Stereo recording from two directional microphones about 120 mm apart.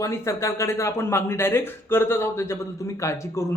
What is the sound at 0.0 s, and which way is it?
Speech, 25° left (ahead or behind).